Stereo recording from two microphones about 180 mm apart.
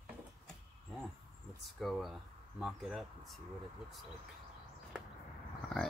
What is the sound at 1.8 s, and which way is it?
Speech, centre (ahead or behind).